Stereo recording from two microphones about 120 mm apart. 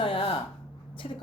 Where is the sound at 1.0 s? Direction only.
65° left (ahead or behind).